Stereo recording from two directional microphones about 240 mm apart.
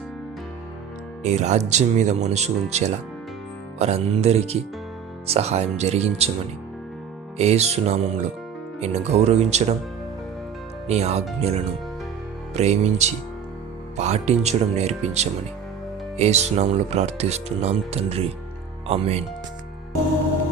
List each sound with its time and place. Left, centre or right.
1.2 s speech: right
7.3 s speech: right
10.8 s speech: right
12.5 s speech: right